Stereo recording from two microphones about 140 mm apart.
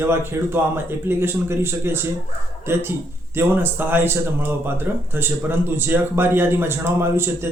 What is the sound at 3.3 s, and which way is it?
Speech, 15° right (ahead or behind).